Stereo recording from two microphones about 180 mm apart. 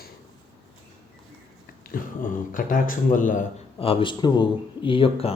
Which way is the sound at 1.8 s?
50° left (ahead or behind).